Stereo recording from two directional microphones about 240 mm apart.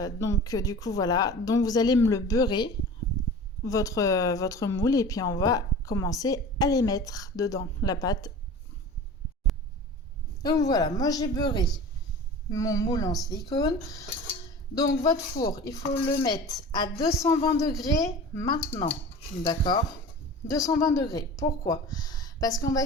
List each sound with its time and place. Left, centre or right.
0.0 s speech: centre
10.4 s speech: centre